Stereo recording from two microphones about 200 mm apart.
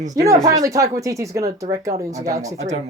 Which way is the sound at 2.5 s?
35° right (ahead or behind).